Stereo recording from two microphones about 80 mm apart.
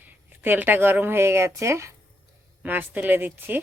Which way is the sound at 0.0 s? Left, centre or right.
Right.